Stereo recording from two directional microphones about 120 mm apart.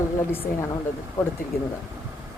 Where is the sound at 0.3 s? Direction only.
20° left (ahead or behind).